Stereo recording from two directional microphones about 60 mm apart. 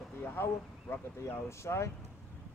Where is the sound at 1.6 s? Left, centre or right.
Left.